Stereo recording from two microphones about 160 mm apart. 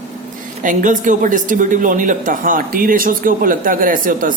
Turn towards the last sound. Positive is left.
turn(degrees=-60)  # may be behind; listen again after turning